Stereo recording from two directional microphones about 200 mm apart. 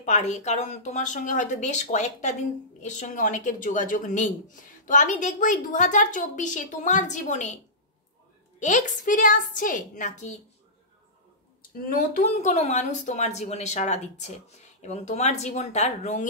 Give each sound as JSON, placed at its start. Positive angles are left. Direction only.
{"t": 0.0, "sound": "a woman's voice", "side_deg": 35}
{"t": 11.9, "sound": "a woman's voice", "side_deg": 35}